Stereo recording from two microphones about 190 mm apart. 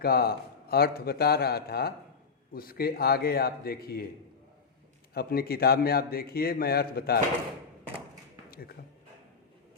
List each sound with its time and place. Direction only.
0.0 s a man's voice: 55° left (ahead or behind)
5.1 s a man's voice: 55° left (ahead or behind)
8.4 s a sound: 50° left (ahead or behind)